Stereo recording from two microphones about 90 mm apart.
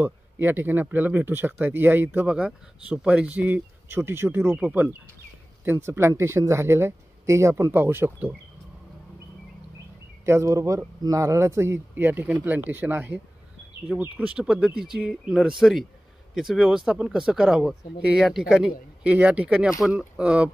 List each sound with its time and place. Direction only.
0.0 s speech: 25° right (ahead or behind)
2.2 s speech: 10° right (ahead or behind)
5.7 s speech: 30° right (ahead or behind)
10.2 s speech: 30° right (ahead or behind); by 20.5 s 15° right (ahead or behind)